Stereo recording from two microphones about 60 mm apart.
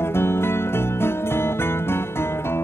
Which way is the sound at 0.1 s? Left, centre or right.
Left.